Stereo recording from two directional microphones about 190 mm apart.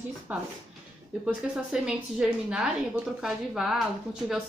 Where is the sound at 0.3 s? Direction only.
5° right (ahead or behind).